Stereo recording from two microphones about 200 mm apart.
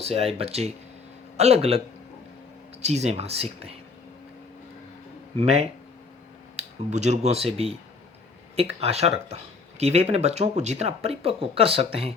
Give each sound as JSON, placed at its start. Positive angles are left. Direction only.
{"t": 0.0, "sound": "speech", "side_deg": -30}
{"t": 2.8, "sound": "speech", "side_deg": -35}
{"t": 5.4, "sound": "speech", "side_deg": -30}